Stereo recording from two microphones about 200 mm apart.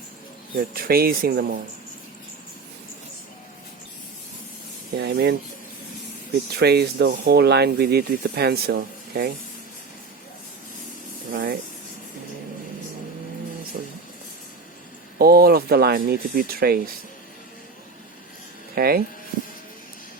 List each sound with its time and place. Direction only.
0.5 s speech: 45° right (ahead or behind)
4.9 s speech: 55° right (ahead or behind)
6.5 s speech: 55° right (ahead or behind)
11.3 s speech: 45° right (ahead or behind)
15.2 s speech: 50° right (ahead or behind)
18.7 s speech: 50° right (ahead or behind)